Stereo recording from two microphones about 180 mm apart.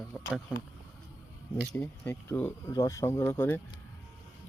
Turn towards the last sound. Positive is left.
turn(degrees=10)  # may be behind; listen again after turning